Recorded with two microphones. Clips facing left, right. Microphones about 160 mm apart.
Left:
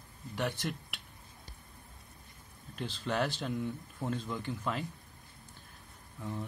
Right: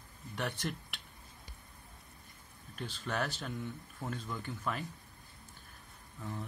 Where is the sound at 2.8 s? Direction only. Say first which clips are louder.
Left 4 dB; 25° left (ahead or behind).